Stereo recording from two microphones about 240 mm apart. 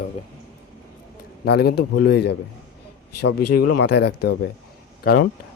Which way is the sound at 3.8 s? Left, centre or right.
Left.